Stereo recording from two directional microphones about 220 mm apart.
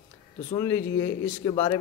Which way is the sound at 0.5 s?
15° left (ahead or behind).